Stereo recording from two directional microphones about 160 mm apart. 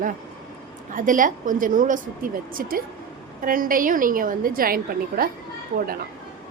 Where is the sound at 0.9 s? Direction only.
55° right (ahead or behind).